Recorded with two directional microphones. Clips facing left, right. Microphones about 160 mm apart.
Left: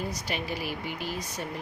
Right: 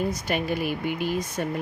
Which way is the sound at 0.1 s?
50° right (ahead or behind).